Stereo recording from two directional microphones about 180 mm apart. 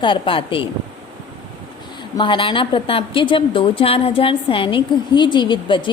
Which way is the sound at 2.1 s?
25° left (ahead or behind).